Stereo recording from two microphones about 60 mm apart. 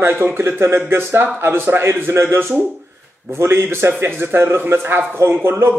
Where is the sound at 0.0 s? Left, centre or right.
Right.